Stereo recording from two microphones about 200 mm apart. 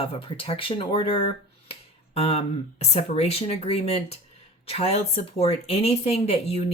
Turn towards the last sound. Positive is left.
turn(degrees=30)  # may be behind; listen again after turning